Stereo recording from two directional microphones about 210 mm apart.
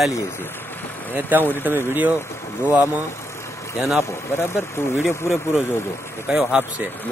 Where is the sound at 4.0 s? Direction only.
10° left (ahead or behind).